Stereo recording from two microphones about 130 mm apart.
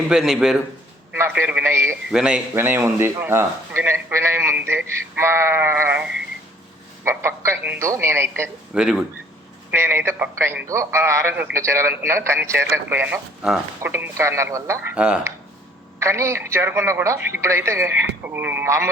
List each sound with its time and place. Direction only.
0.1 s a man's voice: 5° right (ahead or behind)
1.1 s a man's voice: 15° right (ahead or behind)
2.0 s a man's voice: 5° right (ahead or behind)
7.0 s speech: 20° right (ahead or behind)
8.7 s a man's voice: 5° right (ahead or behind)
9.7 s speech: 20° right (ahead or behind)
14.9 s a man's voice: 10° right (ahead or behind)
16.0 s speech: 20° right (ahead or behind)